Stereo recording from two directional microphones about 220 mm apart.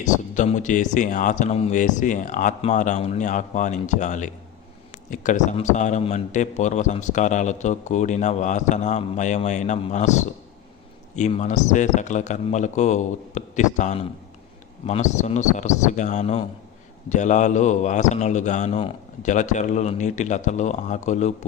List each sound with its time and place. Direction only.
0.0 s a man's voice: 35° left (ahead or behind)